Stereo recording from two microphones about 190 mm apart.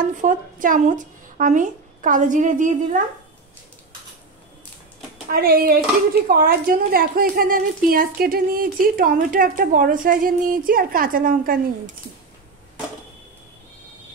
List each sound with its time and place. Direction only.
0.0 s a woman's voice: 45° right (ahead or behind)
5.3 s a woman's voice: 50° right (ahead or behind)